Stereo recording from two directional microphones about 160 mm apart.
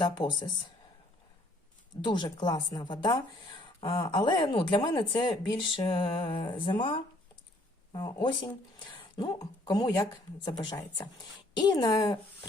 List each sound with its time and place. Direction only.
0.0 s speech: 25° left (ahead or behind)
2.0 s speech: 30° left (ahead or behind)